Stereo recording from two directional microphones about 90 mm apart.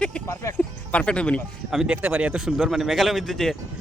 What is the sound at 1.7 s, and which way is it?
A man's voice, 5° right (ahead or behind).